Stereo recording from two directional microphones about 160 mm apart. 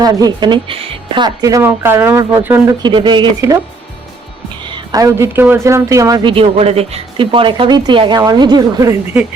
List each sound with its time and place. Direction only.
0.0 s speech: 25° right (ahead or behind)
2.8 s speech: 30° right (ahead or behind)
4.7 s speech: 25° right (ahead or behind)